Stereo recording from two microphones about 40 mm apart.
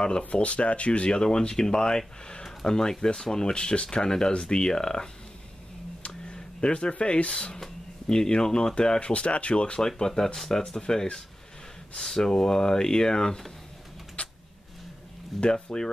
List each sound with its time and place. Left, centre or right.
0.2 s speech: left
1.1 s speech: centre
6.0 s a sound: left
8.1 s speech: centre
9.8 s speech: centre
14.2 s a sound: left
15.4 s speech: centre